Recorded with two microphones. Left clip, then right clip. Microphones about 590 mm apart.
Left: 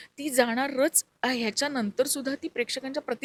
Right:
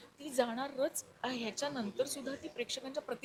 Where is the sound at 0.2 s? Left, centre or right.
Left.